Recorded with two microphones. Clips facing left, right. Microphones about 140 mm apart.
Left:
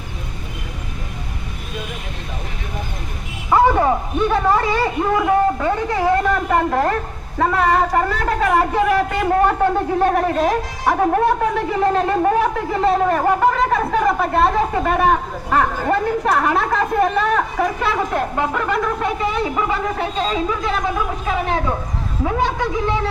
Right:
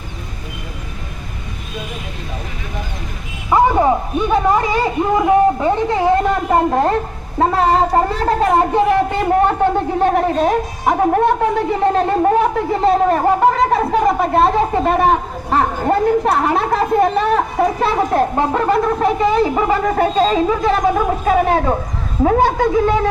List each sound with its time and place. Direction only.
3.5 s speech: 15° right (ahead or behind)
11.9 s speech: 25° right (ahead or behind); by 22.6 s 45° right (ahead or behind)